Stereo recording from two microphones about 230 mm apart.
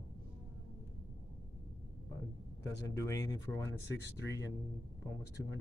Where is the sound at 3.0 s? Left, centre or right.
Centre.